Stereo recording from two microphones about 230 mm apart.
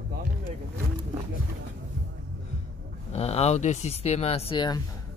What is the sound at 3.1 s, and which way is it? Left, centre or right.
A man's voice, left.